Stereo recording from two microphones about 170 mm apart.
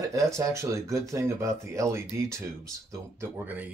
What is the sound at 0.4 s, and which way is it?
Speech, 15° right (ahead or behind).